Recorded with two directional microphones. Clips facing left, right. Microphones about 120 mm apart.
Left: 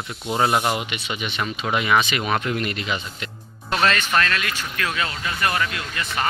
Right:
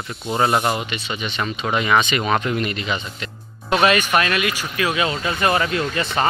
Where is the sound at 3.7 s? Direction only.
10° right (ahead or behind); by 6.3 s 30° right (ahead or behind).